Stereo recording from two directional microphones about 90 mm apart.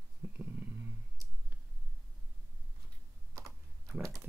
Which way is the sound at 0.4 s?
20° right (ahead or behind).